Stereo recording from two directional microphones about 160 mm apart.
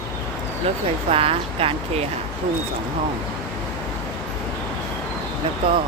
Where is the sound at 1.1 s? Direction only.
35° right (ahead or behind).